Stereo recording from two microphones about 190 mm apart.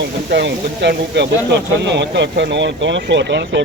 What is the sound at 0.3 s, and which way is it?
Speech, 65° right (ahead or behind).